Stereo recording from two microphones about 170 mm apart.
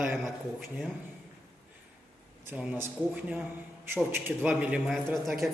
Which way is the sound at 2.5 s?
10° right (ahead or behind).